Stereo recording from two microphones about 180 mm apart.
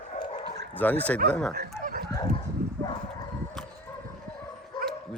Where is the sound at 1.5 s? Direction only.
60° right (ahead or behind).